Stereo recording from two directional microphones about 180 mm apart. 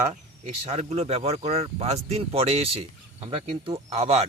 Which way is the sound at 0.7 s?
40° right (ahead or behind).